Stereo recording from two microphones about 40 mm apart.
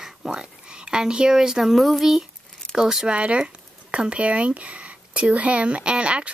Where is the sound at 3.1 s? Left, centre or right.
Right.